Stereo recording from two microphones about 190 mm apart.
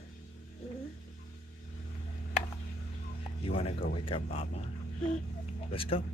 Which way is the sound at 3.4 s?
30° left (ahead or behind).